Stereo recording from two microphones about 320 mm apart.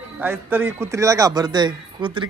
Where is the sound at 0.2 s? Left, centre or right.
Centre.